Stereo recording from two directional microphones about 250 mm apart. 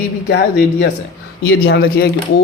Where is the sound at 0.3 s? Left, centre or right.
Left.